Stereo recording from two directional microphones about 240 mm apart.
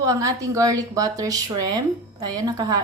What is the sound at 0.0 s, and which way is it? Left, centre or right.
A woman's voice, centre.